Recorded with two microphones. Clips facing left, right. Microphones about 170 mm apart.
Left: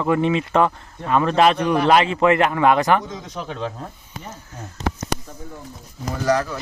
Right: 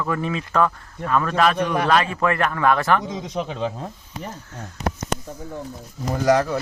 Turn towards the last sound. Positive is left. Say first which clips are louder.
# right 2 dB
turn(degrees=-20)  # may be behind; listen again after turning